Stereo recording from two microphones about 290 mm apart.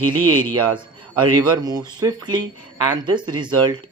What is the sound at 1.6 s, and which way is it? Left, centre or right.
Speech, centre.